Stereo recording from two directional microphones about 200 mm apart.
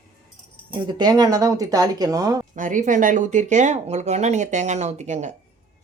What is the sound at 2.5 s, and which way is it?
Speech, 40° right (ahead or behind).